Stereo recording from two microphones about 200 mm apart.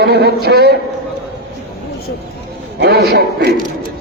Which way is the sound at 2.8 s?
55° right (ahead or behind).